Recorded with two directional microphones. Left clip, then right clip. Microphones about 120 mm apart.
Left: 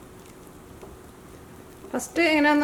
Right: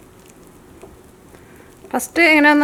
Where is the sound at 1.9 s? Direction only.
35° right (ahead or behind).